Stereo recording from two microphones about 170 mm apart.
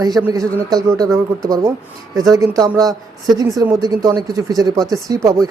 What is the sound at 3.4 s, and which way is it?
Speech, 20° right (ahead or behind).